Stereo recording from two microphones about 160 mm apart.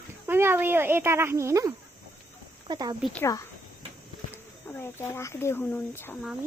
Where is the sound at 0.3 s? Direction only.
15° right (ahead or behind).